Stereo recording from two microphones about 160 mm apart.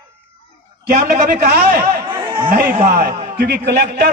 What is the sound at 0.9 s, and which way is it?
Speech, 65° right (ahead or behind).